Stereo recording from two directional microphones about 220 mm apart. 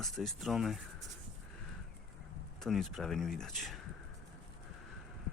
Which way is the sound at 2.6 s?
Centre (ahead or behind).